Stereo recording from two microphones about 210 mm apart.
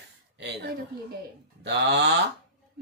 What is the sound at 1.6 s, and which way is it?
Speech, 55° right (ahead or behind).